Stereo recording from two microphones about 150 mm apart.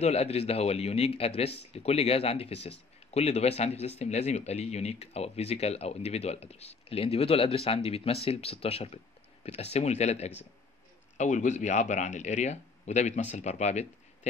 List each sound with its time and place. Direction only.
0.0 s speech: 45° left (ahead or behind)